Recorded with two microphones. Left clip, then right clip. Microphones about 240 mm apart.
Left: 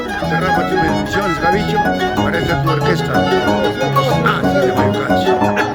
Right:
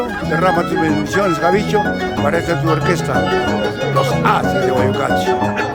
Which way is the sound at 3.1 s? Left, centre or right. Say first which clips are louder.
Left 4 dB; left.